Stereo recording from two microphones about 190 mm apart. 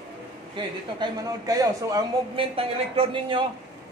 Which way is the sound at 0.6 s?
25° right (ahead or behind).